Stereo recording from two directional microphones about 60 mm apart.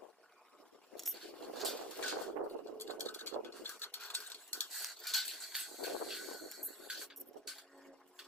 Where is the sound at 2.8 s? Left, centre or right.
Left.